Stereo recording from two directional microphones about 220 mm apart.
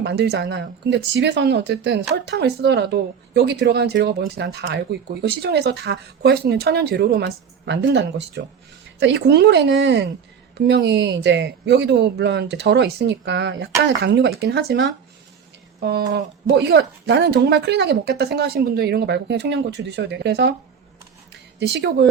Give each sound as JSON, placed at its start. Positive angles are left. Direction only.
{"t": 0.0, "sound": "speech", "side_deg": -50}
{"t": 21.6, "sound": "speech", "side_deg": -50}